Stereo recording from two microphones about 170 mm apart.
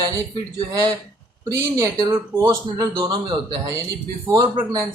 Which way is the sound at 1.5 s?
20° right (ahead or behind).